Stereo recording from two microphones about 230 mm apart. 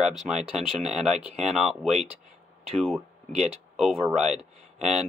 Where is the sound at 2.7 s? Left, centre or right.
Centre.